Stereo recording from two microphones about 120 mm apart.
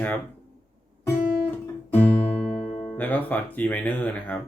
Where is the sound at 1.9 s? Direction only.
10° left (ahead or behind).